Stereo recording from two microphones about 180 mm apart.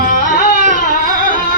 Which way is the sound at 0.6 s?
45° right (ahead or behind).